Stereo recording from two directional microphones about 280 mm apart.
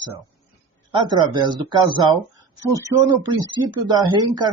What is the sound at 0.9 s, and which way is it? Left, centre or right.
Speech, centre.